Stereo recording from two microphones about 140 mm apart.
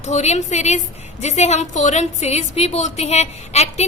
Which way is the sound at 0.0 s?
55° left (ahead or behind).